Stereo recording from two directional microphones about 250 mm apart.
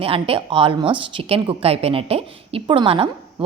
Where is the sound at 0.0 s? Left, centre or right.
Right.